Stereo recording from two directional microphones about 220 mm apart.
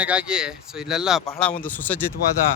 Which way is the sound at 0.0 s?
5° right (ahead or behind).